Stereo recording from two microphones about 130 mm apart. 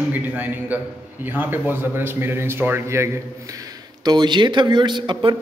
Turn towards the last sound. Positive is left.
turn(degrees=-35)  # may be behind; listen again after turning